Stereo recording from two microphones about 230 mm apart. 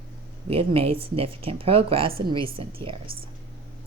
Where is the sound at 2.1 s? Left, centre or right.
Right.